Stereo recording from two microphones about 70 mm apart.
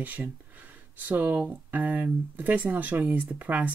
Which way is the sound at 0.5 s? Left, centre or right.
Right.